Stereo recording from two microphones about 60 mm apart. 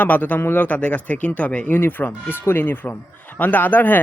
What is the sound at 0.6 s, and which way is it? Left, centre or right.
Speech, left.